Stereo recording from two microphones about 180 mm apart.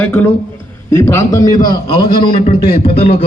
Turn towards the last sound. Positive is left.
turn(degrees=35)  # may be behind; listen again after turning